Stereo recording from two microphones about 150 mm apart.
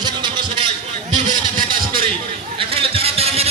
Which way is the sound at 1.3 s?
65° right (ahead or behind).